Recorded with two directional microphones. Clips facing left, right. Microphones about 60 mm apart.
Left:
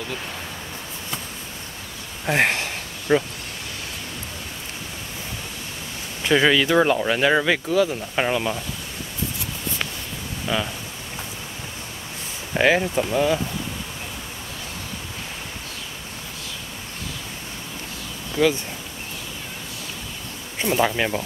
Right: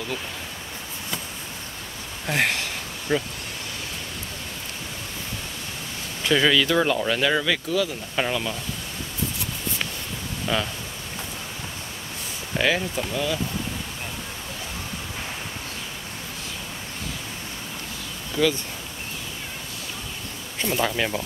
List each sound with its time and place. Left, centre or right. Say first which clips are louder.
2.2 s a sound: left 4 dB; left
6.2 s speech: left 2 dB; left
10.4 s speech: left 1 dB; centre
12.5 s speech: left 5 dB; left
18.4 s speech: left 3 dB; centre
20.5 s speech: left 4 dB; centre